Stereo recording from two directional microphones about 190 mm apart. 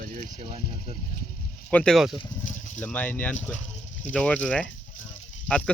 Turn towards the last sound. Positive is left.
turn(degrees=5)  # may be behind; listen again after turning